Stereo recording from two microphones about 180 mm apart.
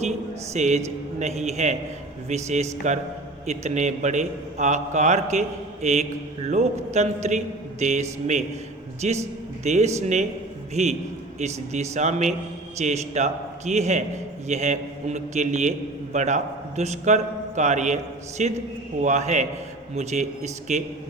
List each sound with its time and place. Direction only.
0.5 s a man's voice: 40° right (ahead or behind)